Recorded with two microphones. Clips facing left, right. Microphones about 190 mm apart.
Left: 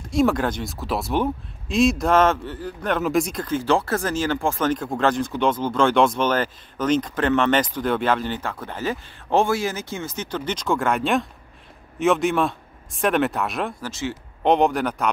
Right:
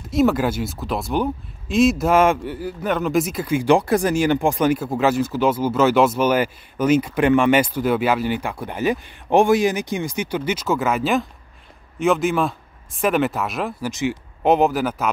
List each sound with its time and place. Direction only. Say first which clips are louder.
0.1 s speech: right 2 dB; centre (ahead or behind)
13.8 s speech: right 5 dB; 15° right (ahead or behind)